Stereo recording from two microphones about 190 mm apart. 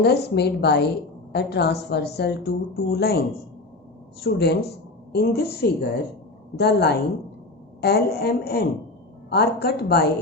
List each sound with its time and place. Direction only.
0.0 s a woman's voice: 60° left (ahead or behind)